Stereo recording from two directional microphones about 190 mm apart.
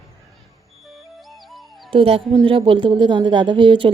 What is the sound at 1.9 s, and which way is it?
A woman's voice, 30° right (ahead or behind).